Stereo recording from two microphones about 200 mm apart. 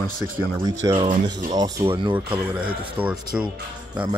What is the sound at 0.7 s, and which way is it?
Speech, 20° right (ahead or behind).